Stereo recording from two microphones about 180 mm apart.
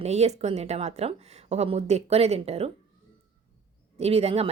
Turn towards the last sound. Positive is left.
turn(degrees=-35)  # may be behind; listen again after turning